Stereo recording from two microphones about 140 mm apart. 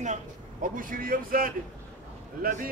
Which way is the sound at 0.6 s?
80° right.